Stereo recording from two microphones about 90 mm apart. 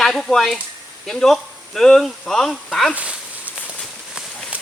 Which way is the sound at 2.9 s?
15° right (ahead or behind).